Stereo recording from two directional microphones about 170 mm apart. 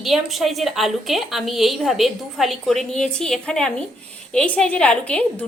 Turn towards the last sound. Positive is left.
turn(degrees=10)  # may be behind; listen again after turning